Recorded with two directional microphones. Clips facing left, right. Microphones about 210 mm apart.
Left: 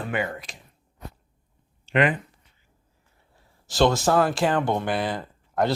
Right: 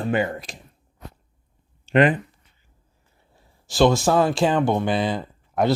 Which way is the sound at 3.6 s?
10° right (ahead or behind).